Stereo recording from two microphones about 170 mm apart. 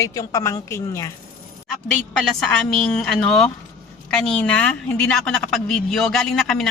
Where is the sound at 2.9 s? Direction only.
5° left (ahead or behind).